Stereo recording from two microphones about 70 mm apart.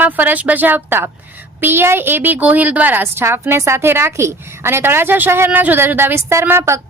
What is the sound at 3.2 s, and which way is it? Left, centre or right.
A woman's voice, right.